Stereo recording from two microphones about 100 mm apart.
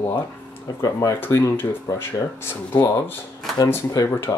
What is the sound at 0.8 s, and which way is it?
Speech, 35° left (ahead or behind).